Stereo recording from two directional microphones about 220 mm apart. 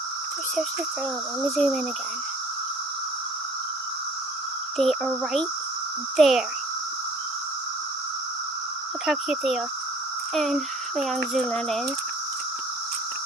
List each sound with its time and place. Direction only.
1.5 s speech: centre (ahead or behind)
4.8 s speech: centre (ahead or behind)
9.0 s speech: centre (ahead or behind)